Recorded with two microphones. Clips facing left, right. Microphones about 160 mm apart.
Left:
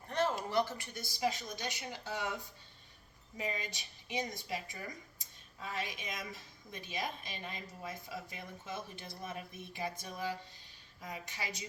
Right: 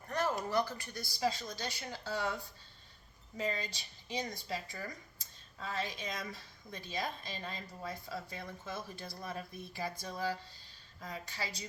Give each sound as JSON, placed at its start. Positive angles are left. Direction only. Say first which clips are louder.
{"t": 0.1, "sound": "a woman's voice", "louder": "even", "side_deg": 25}
{"t": 3.3, "sound": "a woman's voice", "louder": "right 2 dB", "side_deg": 15}